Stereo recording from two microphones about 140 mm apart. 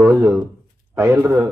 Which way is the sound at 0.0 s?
20° right (ahead or behind).